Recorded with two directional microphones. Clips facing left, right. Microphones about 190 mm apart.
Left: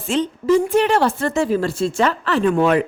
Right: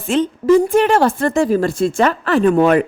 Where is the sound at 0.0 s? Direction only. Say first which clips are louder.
Right 4 dB; 50° right (ahead or behind).